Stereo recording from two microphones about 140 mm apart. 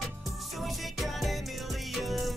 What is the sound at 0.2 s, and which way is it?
Music, centre (ahead or behind).